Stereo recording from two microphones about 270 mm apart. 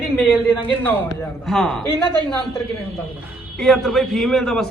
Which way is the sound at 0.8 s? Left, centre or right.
Centre.